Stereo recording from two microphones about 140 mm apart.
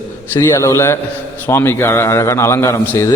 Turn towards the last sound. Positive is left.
turn(degrees=20)  # may be behind; listen again after turning